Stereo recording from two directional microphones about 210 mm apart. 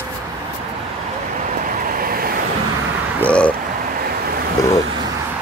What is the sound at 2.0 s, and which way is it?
Vehicle, 45° right (ahead or behind).